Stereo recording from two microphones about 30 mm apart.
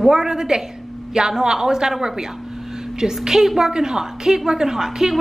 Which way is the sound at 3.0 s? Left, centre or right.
Right.